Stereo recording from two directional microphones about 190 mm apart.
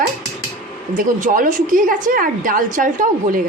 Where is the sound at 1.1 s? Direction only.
45° right (ahead or behind).